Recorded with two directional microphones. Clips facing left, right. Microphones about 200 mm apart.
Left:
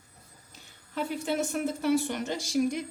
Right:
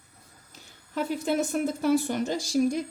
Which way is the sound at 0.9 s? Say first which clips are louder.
Right 3 dB; 40° right (ahead or behind).